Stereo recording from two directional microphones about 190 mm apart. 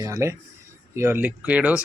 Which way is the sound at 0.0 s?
15° right (ahead or behind).